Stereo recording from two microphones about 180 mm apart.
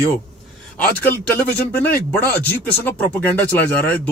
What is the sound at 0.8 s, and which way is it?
Speech, 10° left (ahead or behind).